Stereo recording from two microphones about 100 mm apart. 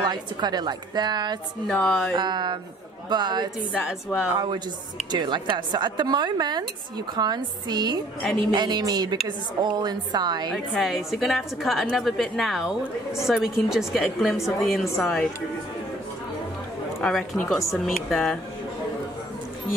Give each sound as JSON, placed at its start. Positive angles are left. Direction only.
{"t": 0.0, "sound": "a woman's voice", "side_deg": -45}
{"t": 1.7, "sound": "speech", "side_deg": 10}
{"t": 2.1, "sound": "a woman's voice", "side_deg": -45}
{"t": 4.1, "sound": "speech", "side_deg": 10}
{"t": 5.1, "sound": "a woman's voice", "side_deg": -50}
{"t": 10.5, "sound": "a woman's voice", "side_deg": 0}
{"t": 17.0, "sound": "a woman's voice", "side_deg": 5}